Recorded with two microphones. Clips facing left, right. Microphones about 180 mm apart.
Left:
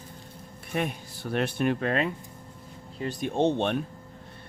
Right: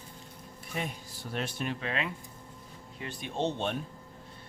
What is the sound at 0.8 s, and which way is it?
Speech, 65° left (ahead or behind).